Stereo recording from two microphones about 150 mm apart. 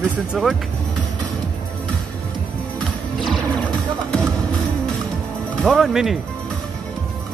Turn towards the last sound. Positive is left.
turn(degrees=0)  # may be behind; listen again after turning